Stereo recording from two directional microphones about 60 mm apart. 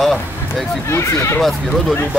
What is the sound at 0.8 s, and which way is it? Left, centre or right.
Speech, left.